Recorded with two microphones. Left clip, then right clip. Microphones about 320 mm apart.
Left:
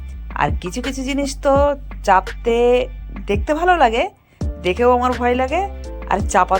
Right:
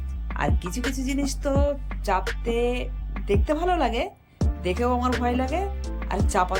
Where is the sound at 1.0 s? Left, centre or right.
Centre.